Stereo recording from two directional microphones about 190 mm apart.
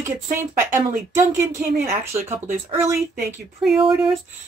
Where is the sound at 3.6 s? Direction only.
Centre (ahead or behind).